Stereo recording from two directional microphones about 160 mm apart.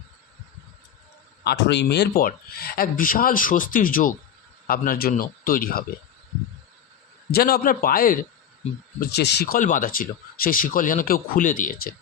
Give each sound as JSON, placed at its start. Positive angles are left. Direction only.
{"t": 1.5, "sound": "speech", "side_deg": 90}
{"t": 7.3, "sound": "speech", "side_deg": 75}
{"t": 9.0, "sound": "speech", "side_deg": 90}
{"t": 9.6, "sound": "speech", "side_deg": 55}